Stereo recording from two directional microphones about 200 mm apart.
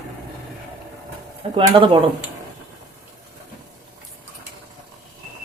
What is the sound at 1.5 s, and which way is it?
Speech, 25° right (ahead or behind).